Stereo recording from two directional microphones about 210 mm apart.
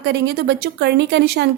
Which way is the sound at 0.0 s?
55° right (ahead or behind).